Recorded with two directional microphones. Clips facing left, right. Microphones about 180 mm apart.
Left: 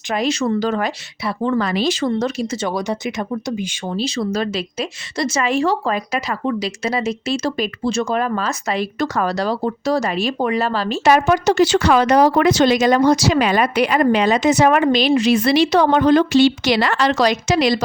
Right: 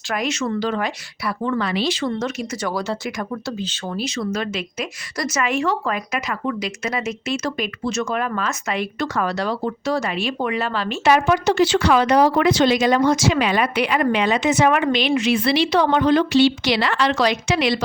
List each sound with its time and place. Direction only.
0.1 s speech: 30° left (ahead or behind)
3.9 s speech: 30° left (ahead or behind)